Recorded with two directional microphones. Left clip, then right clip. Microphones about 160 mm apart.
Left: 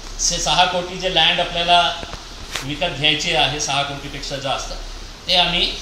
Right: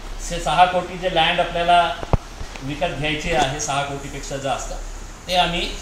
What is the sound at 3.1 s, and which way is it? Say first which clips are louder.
A man's voice: left 2 dB; 15° right (ahead or behind).